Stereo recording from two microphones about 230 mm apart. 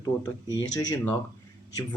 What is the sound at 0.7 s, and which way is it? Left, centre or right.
Speech, centre.